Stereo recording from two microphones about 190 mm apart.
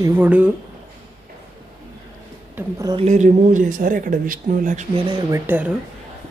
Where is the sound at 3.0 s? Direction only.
40° right (ahead or behind).